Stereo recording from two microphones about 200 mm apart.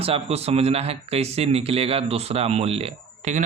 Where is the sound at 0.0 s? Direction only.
30° right (ahead or behind).